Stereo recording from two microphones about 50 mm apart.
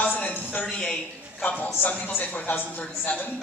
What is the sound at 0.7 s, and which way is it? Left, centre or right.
Speech, centre.